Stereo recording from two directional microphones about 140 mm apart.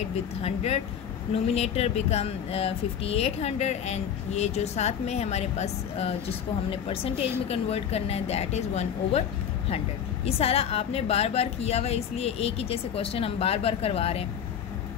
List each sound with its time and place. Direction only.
0.4 s speech: 50° left (ahead or behind)
10.2 s speech: 45° left (ahead or behind)